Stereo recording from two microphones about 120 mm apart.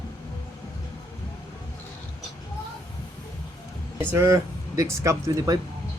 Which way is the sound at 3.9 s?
25° right (ahead or behind).